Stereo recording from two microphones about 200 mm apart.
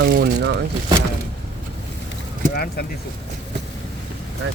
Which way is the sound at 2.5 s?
50° left (ahead or behind).